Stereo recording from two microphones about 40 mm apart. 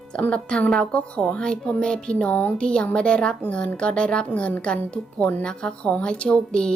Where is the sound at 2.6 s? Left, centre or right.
Left.